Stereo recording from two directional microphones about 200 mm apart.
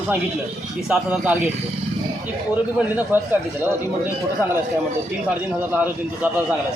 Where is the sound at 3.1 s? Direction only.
10° right (ahead or behind).